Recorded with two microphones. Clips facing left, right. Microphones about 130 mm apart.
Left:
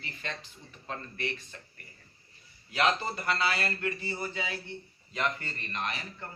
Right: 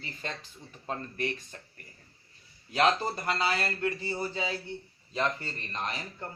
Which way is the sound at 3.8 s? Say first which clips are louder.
Right 3 dB; 30° right (ahead or behind).